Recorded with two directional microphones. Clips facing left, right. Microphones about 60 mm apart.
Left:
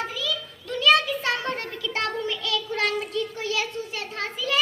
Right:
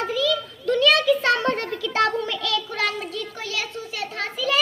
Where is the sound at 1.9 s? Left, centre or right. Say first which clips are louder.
Right 6 dB; right.